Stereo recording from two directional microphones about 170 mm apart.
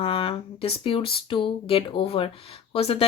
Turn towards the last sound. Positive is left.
turn(degrees=35)  # may be behind; listen again after turning